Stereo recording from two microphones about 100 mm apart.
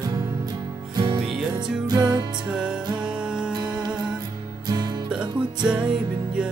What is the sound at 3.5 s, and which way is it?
Music, 45° right (ahead or behind).